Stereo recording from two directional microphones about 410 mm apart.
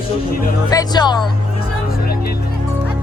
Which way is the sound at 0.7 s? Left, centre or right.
Centre.